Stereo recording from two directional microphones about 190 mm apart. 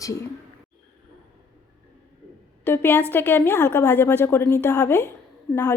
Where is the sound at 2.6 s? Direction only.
10° left (ahead or behind).